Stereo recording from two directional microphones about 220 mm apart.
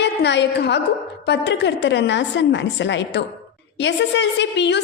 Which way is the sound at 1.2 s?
50° left (ahead or behind).